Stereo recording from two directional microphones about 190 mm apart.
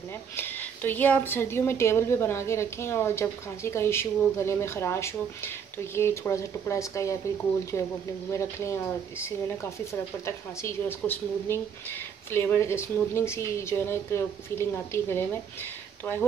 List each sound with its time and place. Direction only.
0.4 s a woman's voice: 10° left (ahead or behind)
8.3 s a woman's voice: 15° left (ahead or behind)